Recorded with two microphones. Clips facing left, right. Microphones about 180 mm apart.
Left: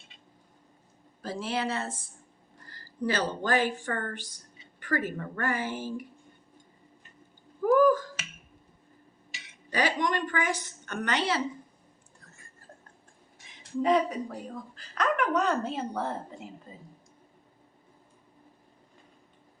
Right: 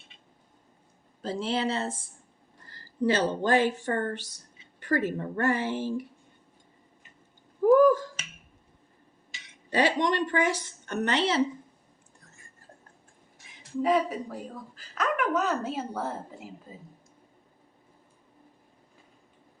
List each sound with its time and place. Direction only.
1.2 s a woman's voice: 25° right (ahead or behind)
7.8 s finger snapping: 25° right (ahead or behind)
9.6 s a woman's voice: 25° right (ahead or behind)
13.8 s a woman's voice: 5° right (ahead or behind)